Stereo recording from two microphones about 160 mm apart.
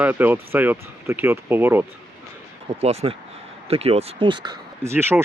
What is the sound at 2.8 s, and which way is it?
Speech, 40° right (ahead or behind).